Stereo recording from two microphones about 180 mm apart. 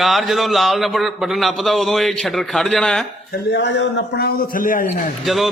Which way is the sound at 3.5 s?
75° left (ahead or behind).